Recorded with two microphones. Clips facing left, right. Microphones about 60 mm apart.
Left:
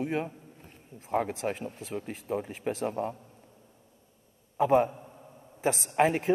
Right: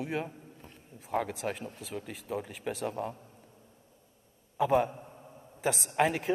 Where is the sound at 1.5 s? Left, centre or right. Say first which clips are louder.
Left 3 dB; left.